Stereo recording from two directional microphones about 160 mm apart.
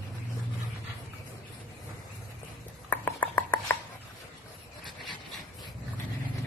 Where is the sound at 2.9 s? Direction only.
10° left (ahead or behind).